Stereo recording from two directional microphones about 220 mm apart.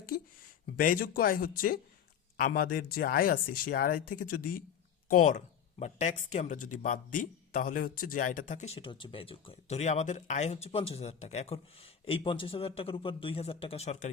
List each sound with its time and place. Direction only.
0.8 s speech: 40° left (ahead or behind)